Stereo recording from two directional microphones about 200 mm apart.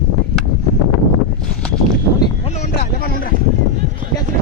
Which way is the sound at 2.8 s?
50° left (ahead or behind).